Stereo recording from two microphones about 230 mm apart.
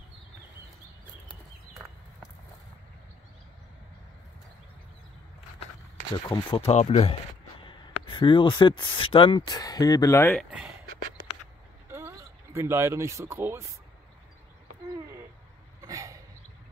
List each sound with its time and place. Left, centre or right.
6.2 s speech: centre
11.9 s speech: centre
15.9 s a sound: centre